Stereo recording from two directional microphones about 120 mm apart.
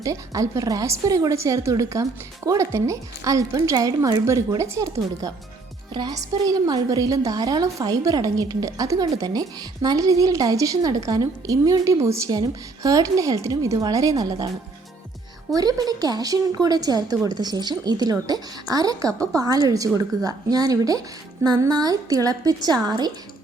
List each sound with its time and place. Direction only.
0.0 s a woman's voice: 25° right (ahead or behind)
15.5 s a woman's voice: 30° right (ahead or behind)
19.0 s a woman's voice: 5° left (ahead or behind)
19.4 s a woman's voice: 30° right (ahead or behind)